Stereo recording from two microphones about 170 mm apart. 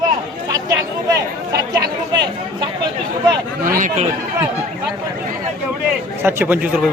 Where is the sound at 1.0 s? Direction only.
20° right (ahead or behind).